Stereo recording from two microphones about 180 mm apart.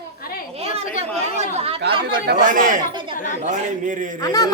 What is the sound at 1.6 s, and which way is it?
Speech, 35° right (ahead or behind).